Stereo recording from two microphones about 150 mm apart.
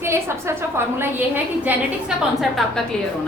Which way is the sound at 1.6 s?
5° right (ahead or behind).